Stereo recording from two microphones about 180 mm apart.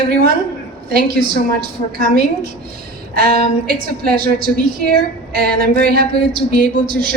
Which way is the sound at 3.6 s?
55° right (ahead or behind).